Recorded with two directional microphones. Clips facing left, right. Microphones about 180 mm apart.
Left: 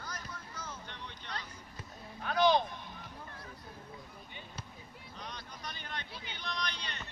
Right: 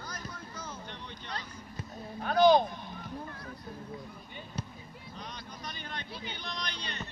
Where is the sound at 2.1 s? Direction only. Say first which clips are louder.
Right 5 dB; 40° right (ahead or behind).